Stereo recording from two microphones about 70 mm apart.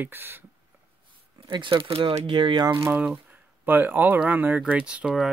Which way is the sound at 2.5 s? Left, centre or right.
Right.